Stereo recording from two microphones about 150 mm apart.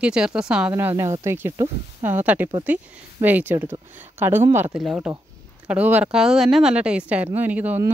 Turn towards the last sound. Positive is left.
turn(degrees=-10)  # may be behind; listen again after turning